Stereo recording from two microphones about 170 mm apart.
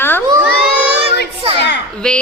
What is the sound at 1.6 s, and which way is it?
Speech, 85° left.